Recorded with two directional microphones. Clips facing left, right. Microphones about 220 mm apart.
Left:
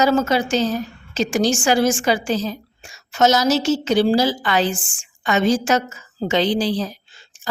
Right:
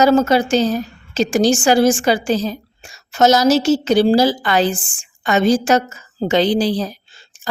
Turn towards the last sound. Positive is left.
turn(degrees=-40)  # may be behind; listen again after turning